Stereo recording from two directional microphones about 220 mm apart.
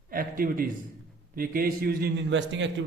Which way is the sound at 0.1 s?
40° right (ahead or behind).